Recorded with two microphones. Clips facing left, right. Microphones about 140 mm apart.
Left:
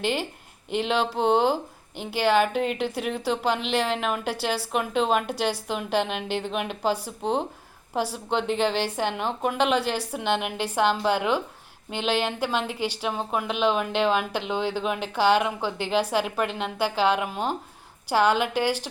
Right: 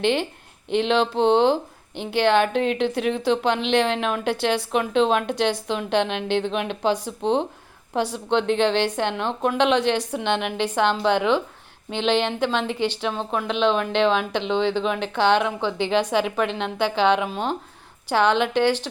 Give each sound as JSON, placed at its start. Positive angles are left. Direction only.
{"t": 0.0, "sound": "a woman's voice", "side_deg": 5}